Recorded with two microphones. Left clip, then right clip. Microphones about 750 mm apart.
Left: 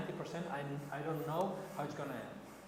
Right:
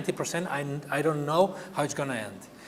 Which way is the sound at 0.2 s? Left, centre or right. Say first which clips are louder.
Right 11 dB; right.